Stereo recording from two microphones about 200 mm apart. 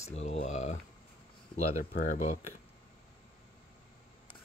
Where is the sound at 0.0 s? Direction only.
35° left (ahead or behind).